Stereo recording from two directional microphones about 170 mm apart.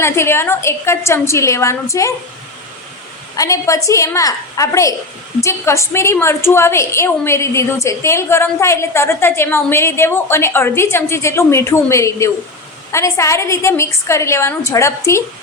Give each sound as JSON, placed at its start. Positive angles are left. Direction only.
{"t": 0.0, "sound": "a woman's voice", "side_deg": 15}
{"t": 3.3, "sound": "a woman's voice", "side_deg": 20}